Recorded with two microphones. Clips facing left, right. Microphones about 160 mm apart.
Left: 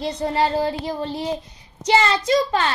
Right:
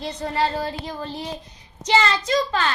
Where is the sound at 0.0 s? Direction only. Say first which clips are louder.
Left 5 dB; 35° left (ahead or behind).